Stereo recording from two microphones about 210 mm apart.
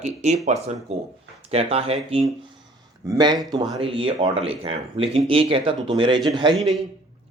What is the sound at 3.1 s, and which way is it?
Speech, 20° right (ahead or behind).